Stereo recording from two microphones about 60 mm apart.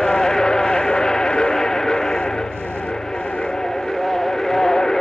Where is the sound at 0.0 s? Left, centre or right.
Centre.